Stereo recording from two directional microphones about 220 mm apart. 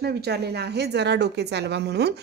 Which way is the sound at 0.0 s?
50° right (ahead or behind).